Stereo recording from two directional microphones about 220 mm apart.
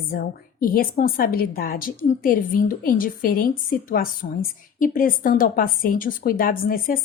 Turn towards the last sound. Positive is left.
turn(degrees=40)  # may be behind; listen again after turning